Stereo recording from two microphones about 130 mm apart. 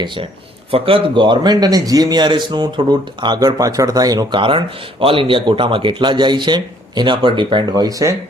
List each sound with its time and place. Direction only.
0.7 s a man's voice: 45° right (ahead or behind); by 8.1 s 25° right (ahead or behind)